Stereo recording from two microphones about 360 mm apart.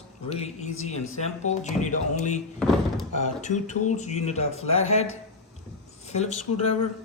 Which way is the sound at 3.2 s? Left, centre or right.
Centre.